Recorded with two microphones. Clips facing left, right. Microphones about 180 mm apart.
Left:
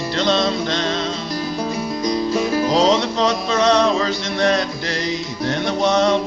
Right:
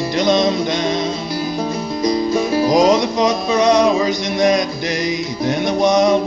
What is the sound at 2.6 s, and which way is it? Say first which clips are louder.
Music: right 4 dB; 15° right (ahead or behind).